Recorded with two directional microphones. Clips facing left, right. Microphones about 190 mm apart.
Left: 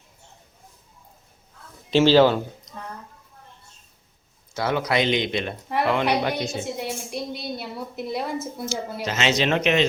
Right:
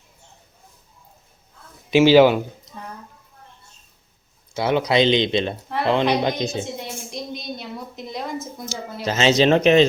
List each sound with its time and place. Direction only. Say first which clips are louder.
1.9 s speech: right 3 dB; 10° right (ahead or behind)
4.5 s speech: right 4 dB; 20° right (ahead or behind)
6.8 s a sound: left 2 dB; 5° left (ahead or behind)
9.0 s speech: right 6 dB; 30° right (ahead or behind)